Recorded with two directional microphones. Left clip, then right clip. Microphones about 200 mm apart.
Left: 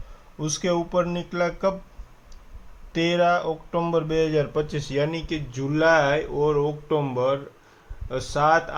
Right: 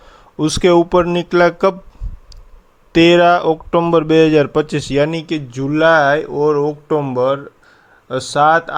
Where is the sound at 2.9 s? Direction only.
50° right (ahead or behind).